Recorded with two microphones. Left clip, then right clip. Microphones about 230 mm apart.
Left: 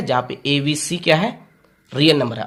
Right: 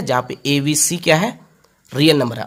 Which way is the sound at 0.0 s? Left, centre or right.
Right.